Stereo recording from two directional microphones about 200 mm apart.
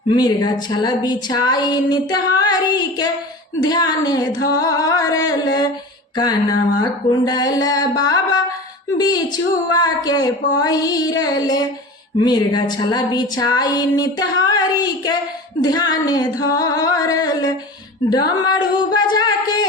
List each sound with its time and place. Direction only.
0.2 s speech: 20° left (ahead or behind)